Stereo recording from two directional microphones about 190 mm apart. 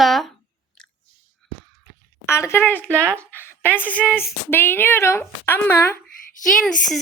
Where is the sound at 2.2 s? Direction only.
15° left (ahead or behind).